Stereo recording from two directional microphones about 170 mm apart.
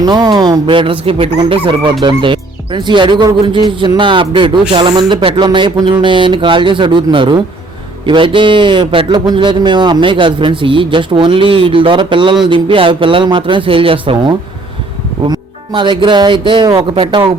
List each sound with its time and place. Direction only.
0.0 s a man's voice: 25° right (ahead or behind)